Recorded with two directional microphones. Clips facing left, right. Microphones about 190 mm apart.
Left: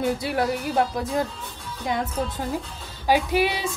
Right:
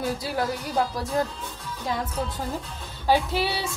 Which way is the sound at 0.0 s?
25° left (ahead or behind).